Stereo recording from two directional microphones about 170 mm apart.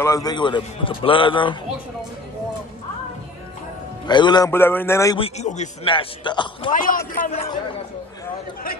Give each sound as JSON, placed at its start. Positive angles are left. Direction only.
{"t": 0.0, "sound": "speech", "side_deg": 20}
{"t": 4.1, "sound": "speech", "side_deg": 25}
{"t": 4.5, "sound": "a man's voice", "side_deg": 15}
{"t": 5.1, "sound": "a man's voice", "side_deg": 40}
{"t": 5.9, "sound": "speech", "side_deg": 30}
{"t": 6.7, "sound": "a man's voice", "side_deg": 50}